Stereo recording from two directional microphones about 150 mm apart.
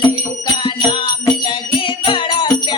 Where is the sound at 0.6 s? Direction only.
30° left (ahead or behind).